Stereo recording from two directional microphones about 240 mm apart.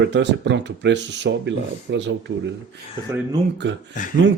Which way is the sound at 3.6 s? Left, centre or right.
Right.